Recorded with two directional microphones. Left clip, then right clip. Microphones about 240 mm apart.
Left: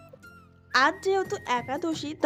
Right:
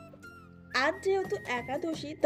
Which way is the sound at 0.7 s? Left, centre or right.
Left.